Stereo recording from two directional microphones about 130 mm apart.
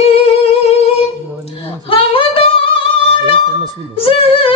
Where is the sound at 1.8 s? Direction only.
45° left (ahead or behind).